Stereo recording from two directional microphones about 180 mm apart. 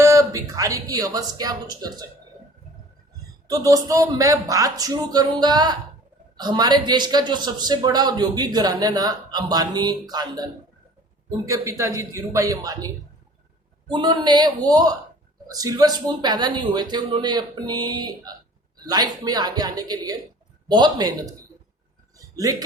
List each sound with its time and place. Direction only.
0.0 s a man's voice: 15° right (ahead or behind)
3.4 s a man's voice: 20° right (ahead or behind)
13.9 s a man's voice: 25° right (ahead or behind)